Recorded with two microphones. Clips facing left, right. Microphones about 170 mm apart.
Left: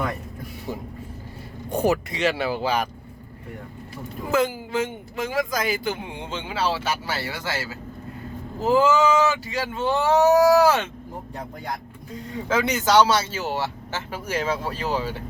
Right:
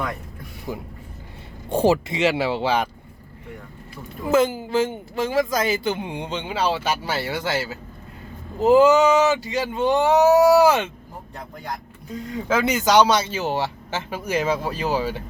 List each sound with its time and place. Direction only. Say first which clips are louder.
1.7 s speech: right 3 dB; 30° right (ahead or behind)
4.3 s speech: right 4 dB; 25° right (ahead or behind)
12.5 s speech: right 2 dB; 10° right (ahead or behind)